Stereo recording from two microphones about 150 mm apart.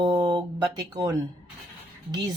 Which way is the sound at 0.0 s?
25° right (ahead or behind).